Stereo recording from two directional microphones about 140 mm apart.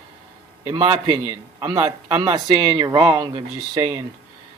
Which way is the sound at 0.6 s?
35° right (ahead or behind).